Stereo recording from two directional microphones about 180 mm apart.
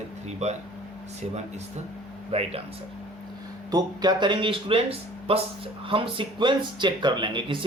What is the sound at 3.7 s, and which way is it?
Speech, 20° right (ahead or behind).